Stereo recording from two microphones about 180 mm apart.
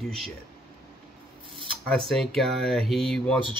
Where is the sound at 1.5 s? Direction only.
30° right (ahead or behind).